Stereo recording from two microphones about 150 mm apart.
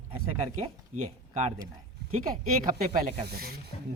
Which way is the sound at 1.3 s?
45° right (ahead or behind).